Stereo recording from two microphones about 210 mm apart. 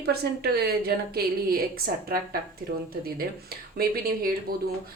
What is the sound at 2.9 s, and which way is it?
A woman's voice, 45° right (ahead or behind).